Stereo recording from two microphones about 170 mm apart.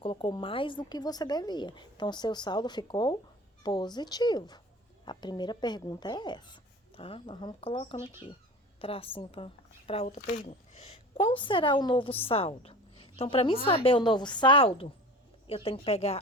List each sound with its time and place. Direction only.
0.0 s a woman's voice: 30° left (ahead or behind)